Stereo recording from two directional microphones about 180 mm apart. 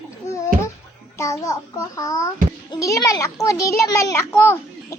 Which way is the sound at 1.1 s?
15° left (ahead or behind).